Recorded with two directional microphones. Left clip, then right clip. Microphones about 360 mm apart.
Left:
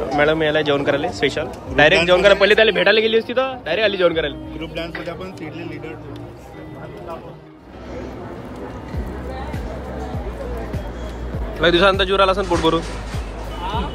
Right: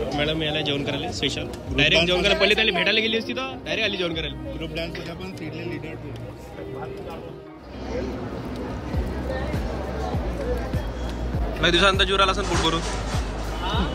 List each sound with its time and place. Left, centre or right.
0.1 s a man's voice: centre
11.6 s a man's voice: centre